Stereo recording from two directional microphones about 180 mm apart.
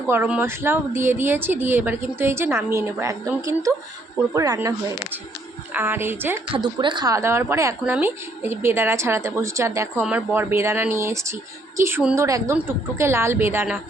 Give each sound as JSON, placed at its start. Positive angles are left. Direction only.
{"t": 0.1, "sound": "speech", "side_deg": -10}
{"t": 5.7, "sound": "speech", "side_deg": -10}
{"t": 6.7, "sound": "speech", "side_deg": -25}